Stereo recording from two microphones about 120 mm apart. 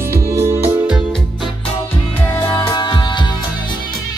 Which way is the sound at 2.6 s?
35° left (ahead or behind).